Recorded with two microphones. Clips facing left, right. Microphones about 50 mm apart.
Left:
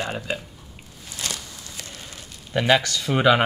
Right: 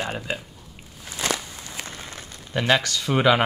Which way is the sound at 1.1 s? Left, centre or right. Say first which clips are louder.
Right 6 dB; right.